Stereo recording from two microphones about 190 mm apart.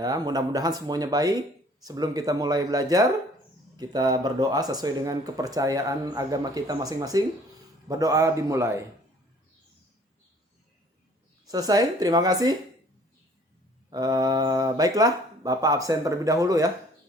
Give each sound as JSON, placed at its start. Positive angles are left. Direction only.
{"t": 0.0, "sound": "a man's voice", "side_deg": -20}
{"t": 11.4, "sound": "speech", "side_deg": -20}
{"t": 13.9, "sound": "speech", "side_deg": -20}